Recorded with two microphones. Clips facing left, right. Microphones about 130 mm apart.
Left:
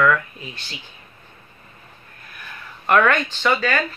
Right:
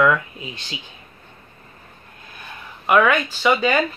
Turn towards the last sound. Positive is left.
turn(degrees=-20)  # may be behind; listen again after turning